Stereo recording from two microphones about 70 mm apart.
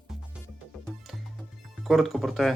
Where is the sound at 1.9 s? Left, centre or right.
Centre.